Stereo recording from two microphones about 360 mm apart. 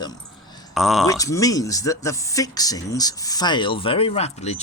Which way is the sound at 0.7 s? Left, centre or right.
Centre.